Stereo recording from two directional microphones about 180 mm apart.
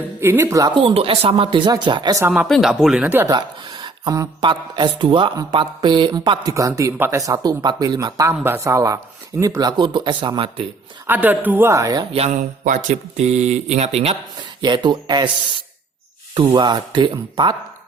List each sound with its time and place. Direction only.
0.2 s speech: 15° right (ahead or behind)
2.3 s speech: 5° right (ahead or behind)
3.2 s speech: 25° right (ahead or behind)
11.0 s speech: 10° right (ahead or behind)
12.6 s speech: 40° right (ahead or behind)
14.6 s speech: 25° right (ahead or behind)
16.5 s speech: 25° right (ahead or behind)